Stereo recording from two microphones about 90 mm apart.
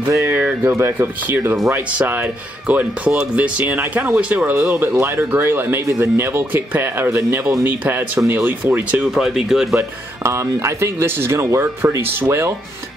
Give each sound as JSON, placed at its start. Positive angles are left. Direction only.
{"t": 0.1, "sound": "speech", "side_deg": -35}
{"t": 9.0, "sound": "speech", "side_deg": -5}
{"t": 9.8, "sound": "speech", "side_deg": -30}